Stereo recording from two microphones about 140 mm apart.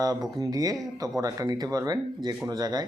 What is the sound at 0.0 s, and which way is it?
Speech, 25° right (ahead or behind).